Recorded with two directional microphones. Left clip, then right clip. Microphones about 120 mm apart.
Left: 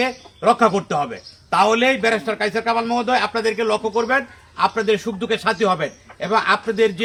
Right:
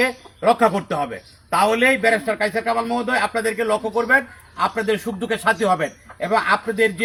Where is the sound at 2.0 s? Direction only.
35° left (ahead or behind).